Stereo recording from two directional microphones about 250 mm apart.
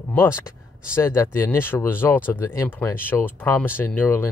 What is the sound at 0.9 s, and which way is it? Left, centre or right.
Speech, centre.